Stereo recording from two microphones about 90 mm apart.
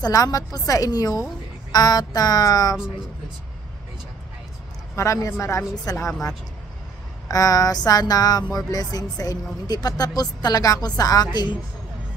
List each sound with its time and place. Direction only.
0.0 s a woman's voice: 45° left (ahead or behind)
4.9 s a woman's voice: 35° left (ahead or behind)
7.2 s a woman's voice: 45° left (ahead or behind)